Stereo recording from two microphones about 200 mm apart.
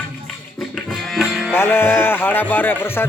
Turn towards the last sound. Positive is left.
turn(degrees=10)  # may be behind; listen again after turning